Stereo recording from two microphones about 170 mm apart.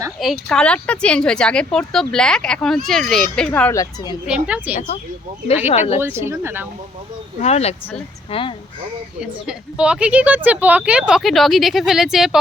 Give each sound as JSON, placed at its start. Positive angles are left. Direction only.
{"t": 0.2, "sound": "speech", "side_deg": 0}
{"t": 4.4, "sound": "speech", "side_deg": -10}
{"t": 5.6, "sound": "speech", "side_deg": 40}
{"t": 6.0, "sound": "speech", "side_deg": -15}
{"t": 7.4, "sound": "speech", "side_deg": 40}
{"t": 9.2, "sound": "speech", "side_deg": -5}